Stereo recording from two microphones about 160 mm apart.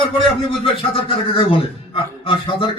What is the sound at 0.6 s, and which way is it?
A man's voice, 35° left (ahead or behind).